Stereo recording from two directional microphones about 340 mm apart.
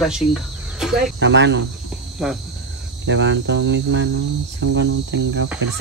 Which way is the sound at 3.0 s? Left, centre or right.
Right.